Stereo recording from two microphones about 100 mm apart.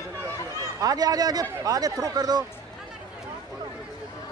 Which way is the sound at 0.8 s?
40° right (ahead or behind).